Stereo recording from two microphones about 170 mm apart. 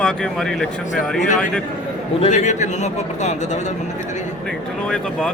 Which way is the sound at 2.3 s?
45° left (ahead or behind).